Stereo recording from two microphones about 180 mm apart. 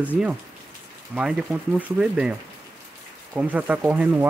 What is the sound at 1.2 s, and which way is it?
Speech, 5° right (ahead or behind).